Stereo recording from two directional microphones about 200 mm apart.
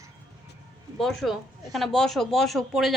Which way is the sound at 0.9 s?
Centre (ahead or behind).